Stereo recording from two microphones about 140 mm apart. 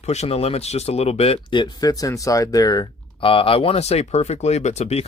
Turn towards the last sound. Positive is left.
turn(degrees=50)  # may be behind; listen again after turning